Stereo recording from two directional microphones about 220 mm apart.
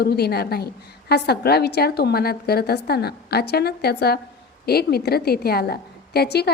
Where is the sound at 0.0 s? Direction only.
45° left (ahead or behind).